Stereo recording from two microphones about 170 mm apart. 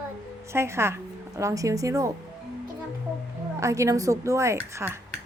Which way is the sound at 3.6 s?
20° right (ahead or behind).